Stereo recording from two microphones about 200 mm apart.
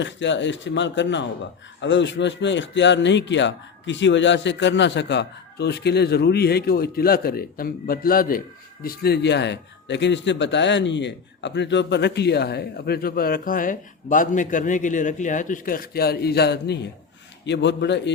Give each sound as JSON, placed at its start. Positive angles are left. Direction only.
{"t": 0.0, "sound": "a man's voice", "side_deg": 65}